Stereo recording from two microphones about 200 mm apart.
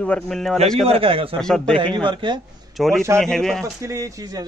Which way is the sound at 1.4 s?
5° left (ahead or behind).